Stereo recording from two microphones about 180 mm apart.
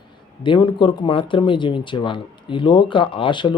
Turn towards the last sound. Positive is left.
turn(degrees=25)  # may be behind; listen again after turning